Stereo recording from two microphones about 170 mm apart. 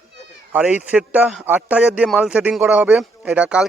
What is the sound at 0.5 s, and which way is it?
Speech, 10° right (ahead or behind).